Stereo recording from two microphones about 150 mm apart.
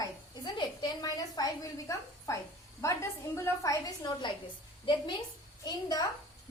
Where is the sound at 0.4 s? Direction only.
30° left (ahead or behind).